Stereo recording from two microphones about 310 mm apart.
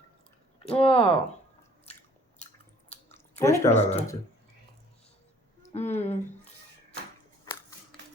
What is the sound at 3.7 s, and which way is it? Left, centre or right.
Speech, left.